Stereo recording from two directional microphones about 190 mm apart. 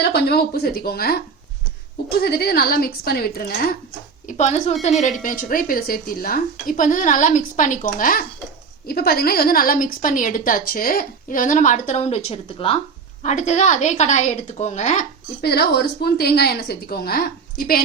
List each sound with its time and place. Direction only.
0.0 s a woman's voice: 60° left (ahead or behind)
4.3 s a woman's voice: 40° left (ahead or behind)
13.2 s a woman's voice: 40° left (ahead or behind)
15.4 s a woman's voice: 55° left (ahead or behind)